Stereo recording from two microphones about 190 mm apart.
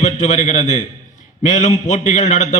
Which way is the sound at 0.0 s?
40° left (ahead or behind).